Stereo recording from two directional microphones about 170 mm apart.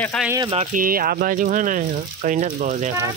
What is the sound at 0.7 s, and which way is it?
Speech, 55° right (ahead or behind).